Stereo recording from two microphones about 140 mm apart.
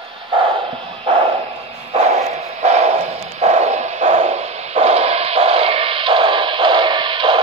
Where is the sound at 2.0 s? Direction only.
50° right (ahead or behind).